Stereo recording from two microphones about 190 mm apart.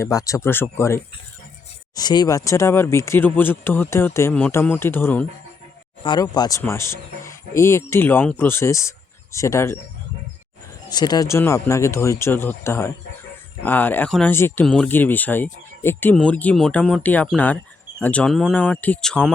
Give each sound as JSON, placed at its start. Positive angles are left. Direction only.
{"t": 0.0, "sound": "speech", "side_deg": 15}
{"t": 2.0, "sound": "speech", "side_deg": 20}
{"t": 6.0, "sound": "speech", "side_deg": 25}
{"t": 10.8, "sound": "speech", "side_deg": 20}